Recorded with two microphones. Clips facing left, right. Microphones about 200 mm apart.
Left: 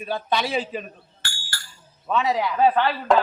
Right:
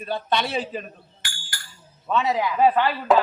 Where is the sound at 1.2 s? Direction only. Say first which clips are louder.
Left 2 dB; 15° right (ahead or behind).